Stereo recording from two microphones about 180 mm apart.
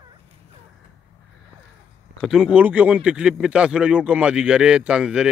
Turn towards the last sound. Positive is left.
turn(degrees=-5)  # may be behind; listen again after turning